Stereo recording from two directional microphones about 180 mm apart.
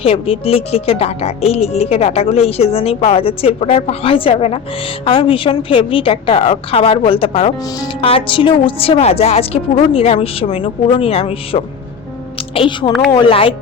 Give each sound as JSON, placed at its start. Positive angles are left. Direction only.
{"t": 0.0, "sound": "a woman's voice", "side_deg": 30}
{"t": 12.9, "sound": "speech", "side_deg": 0}
{"t": 13.1, "sound": "speech", "side_deg": 30}